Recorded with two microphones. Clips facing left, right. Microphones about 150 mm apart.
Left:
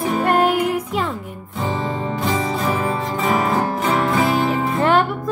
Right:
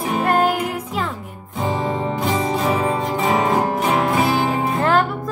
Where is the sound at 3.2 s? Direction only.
20° right (ahead or behind).